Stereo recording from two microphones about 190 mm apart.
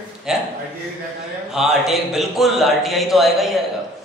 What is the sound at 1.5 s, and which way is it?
A man's voice, centre (ahead or behind).